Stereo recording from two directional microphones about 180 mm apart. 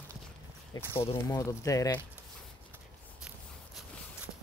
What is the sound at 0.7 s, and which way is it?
Speech, 25° left (ahead or behind).